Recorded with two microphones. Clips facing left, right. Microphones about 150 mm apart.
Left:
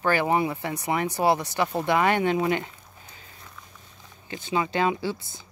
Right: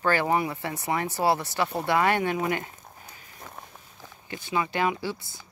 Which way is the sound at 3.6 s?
55° right (ahead or behind).